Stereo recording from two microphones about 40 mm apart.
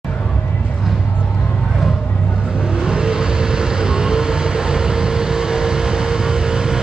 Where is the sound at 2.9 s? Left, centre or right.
Right.